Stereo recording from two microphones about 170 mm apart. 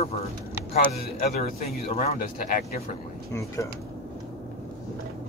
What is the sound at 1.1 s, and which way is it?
Speech, 55° left (ahead or behind).